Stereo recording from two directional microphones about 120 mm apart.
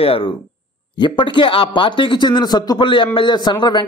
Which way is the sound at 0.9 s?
40° left (ahead or behind).